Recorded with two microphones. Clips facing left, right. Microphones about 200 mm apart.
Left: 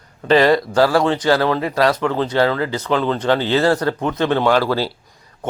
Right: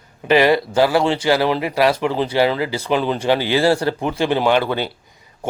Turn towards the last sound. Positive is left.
turn(degrees=-20)  # may be behind; listen again after turning